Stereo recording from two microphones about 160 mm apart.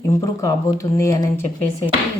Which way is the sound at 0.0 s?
20° left (ahead or behind).